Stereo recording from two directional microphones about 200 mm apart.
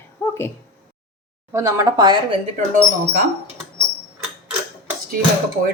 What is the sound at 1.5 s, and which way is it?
Speech, 15° right (ahead or behind).